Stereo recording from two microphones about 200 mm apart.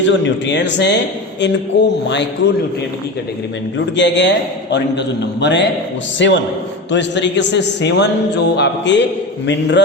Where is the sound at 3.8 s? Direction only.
60° left (ahead or behind).